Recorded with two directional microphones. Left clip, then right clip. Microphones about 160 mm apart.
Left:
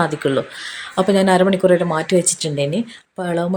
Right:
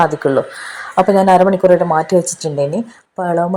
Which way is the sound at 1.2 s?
30° left (ahead or behind).